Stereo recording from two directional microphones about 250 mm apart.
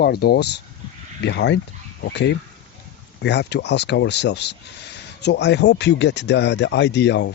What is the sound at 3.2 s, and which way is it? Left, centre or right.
Speech, left.